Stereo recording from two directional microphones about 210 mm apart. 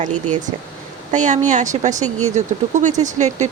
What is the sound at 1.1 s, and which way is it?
Speech, 35° right (ahead or behind).